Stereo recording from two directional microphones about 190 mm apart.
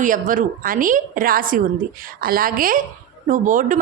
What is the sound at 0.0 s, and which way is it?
A woman's voice, 45° right (ahead or behind).